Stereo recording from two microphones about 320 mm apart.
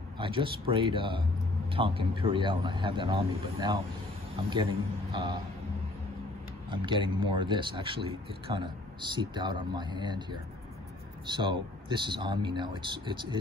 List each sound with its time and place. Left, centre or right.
0.2 s speech: centre
6.7 s speech: centre
11.2 s speech: centre